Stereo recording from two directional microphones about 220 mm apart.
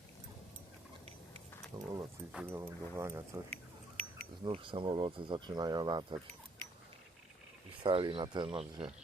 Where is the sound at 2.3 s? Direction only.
10° right (ahead or behind).